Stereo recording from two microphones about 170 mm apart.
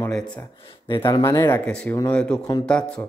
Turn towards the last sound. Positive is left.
turn(degrees=5)  # may be behind; listen again after turning